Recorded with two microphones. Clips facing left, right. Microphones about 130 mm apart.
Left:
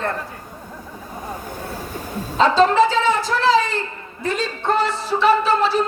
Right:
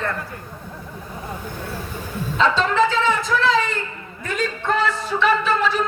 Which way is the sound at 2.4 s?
35° left (ahead or behind).